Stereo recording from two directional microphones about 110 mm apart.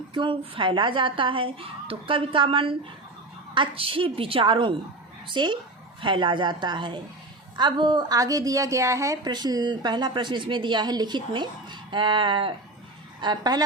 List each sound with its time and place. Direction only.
0.1 s a woman's voice: 50° right (ahead or behind); by 9.1 s 30° right (ahead or behind)
9.2 s speech: 40° right (ahead or behind)
13.2 s speech: 40° right (ahead or behind)